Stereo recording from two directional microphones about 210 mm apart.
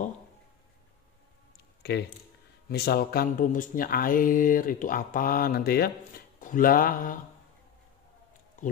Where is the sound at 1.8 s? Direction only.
50° left (ahead or behind).